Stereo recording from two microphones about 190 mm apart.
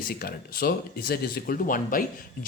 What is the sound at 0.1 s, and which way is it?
Speech, 50° left (ahead or behind).